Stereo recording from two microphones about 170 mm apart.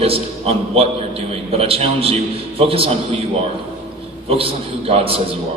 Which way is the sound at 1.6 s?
35° right (ahead or behind).